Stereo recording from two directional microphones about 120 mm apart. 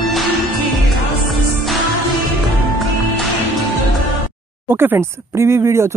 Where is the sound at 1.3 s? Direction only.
Centre (ahead or behind).